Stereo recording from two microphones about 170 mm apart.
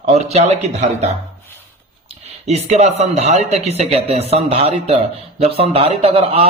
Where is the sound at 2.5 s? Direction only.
40° right (ahead or behind).